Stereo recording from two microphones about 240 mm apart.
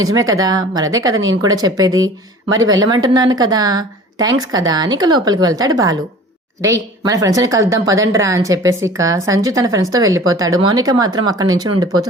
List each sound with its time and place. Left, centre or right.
0.0 s a woman's voice: centre
1.1 s speech: right
1.4 s a woman's voice: centre
7.0 s a woman's voice: centre